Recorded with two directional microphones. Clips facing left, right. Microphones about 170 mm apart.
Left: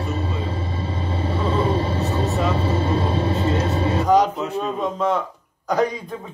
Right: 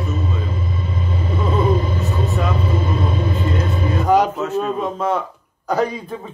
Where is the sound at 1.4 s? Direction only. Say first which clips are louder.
Right 3 dB; 30° left (ahead or behind).